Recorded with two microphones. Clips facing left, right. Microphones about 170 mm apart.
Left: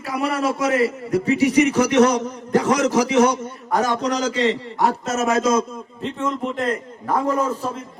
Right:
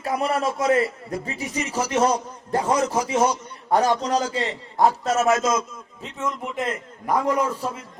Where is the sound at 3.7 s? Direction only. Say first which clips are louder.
Right 1 dB; 45° left (ahead or behind).